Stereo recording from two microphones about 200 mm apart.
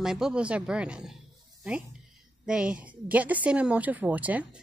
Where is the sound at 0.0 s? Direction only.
Centre (ahead or behind).